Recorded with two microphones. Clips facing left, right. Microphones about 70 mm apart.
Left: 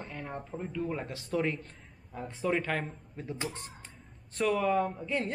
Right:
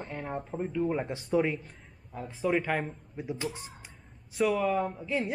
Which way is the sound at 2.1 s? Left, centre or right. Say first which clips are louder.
Right 2 dB; centre.